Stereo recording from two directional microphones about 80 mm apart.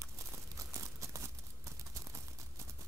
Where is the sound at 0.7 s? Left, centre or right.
Right.